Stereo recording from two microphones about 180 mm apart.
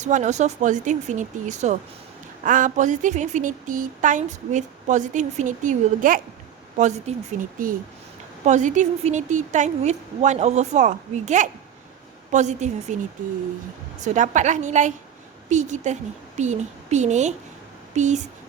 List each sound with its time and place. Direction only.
0.0 s a woman's voice: 40° right (ahead or behind)
7.6 s a woman's voice: 50° right (ahead or behind)
14.0 s a woman's voice: 45° right (ahead or behind)